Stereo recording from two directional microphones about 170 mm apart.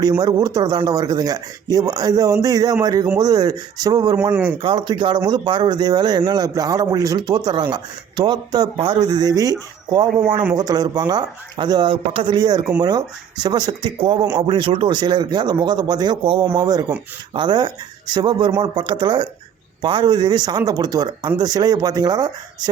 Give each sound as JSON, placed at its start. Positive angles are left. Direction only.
{"t": 0.2, "sound": "speech", "side_deg": -25}
{"t": 4.2, "sound": "speech", "side_deg": -10}
{"t": 4.5, "sound": "speech", "side_deg": -30}